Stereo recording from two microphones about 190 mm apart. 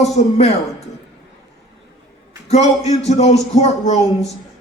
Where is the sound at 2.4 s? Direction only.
35° left (ahead or behind).